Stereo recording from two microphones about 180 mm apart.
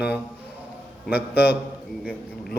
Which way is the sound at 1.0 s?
10° right (ahead or behind).